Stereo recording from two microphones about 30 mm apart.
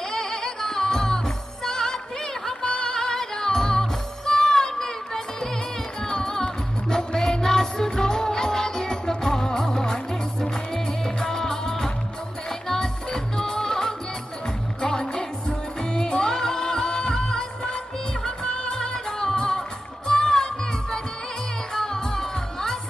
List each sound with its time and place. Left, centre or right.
0.1 s music: centre
19.0 s music: left